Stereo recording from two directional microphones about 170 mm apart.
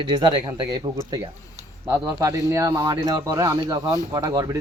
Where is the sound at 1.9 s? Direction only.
15° right (ahead or behind).